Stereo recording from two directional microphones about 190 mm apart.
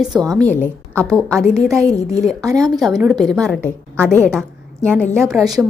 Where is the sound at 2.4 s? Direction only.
15° right (ahead or behind).